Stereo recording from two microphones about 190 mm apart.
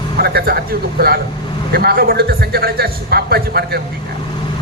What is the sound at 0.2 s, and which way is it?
A man's voice, 55° right (ahead or behind).